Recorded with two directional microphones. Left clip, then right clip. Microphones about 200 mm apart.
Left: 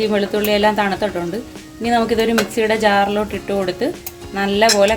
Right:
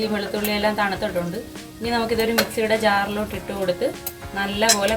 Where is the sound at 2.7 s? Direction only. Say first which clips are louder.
Left 5 dB; 55° left (ahead or behind).